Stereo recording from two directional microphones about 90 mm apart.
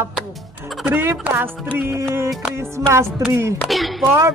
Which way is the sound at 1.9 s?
30° right (ahead or behind).